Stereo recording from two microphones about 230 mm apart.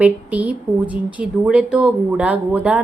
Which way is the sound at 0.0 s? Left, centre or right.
Centre.